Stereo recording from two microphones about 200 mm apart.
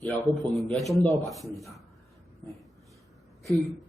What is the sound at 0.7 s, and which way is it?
Speech, 5° left (ahead or behind).